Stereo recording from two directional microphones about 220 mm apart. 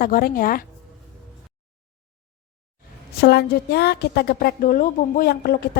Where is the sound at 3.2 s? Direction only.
45° left (ahead or behind).